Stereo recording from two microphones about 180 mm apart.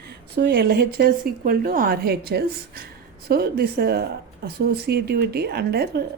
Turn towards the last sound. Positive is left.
turn(degrees=-60)  # may be behind; listen again after turning